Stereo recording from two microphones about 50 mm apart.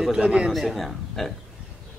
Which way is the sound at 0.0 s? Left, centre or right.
Centre.